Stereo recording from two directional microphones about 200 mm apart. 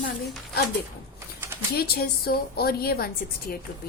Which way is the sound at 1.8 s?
50° left (ahead or behind).